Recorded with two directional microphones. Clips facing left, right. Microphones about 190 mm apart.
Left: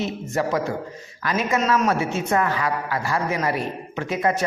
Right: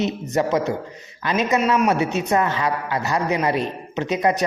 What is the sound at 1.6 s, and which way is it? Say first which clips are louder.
A woman's voice: right 1 dB; 10° right (ahead or behind).